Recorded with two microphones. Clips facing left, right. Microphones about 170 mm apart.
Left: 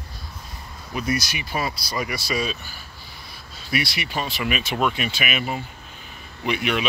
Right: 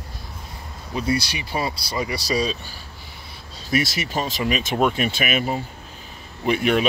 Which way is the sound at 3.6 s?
40° right (ahead or behind).